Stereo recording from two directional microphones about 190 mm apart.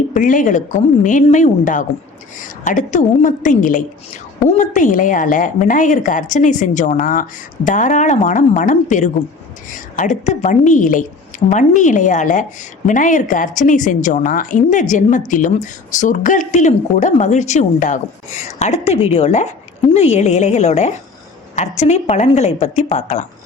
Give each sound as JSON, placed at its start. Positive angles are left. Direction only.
{"t": 0.1, "sound": "a woman's voice", "side_deg": 45}